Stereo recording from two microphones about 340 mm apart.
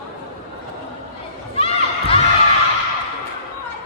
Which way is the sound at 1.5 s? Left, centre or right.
Centre.